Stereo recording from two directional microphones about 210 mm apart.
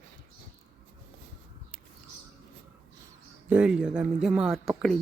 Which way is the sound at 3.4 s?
5° right (ahead or behind).